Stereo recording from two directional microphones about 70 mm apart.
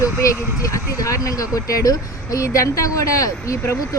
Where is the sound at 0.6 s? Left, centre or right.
Left.